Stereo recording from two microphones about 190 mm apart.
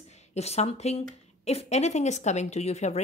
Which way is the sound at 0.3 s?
35° left (ahead or behind).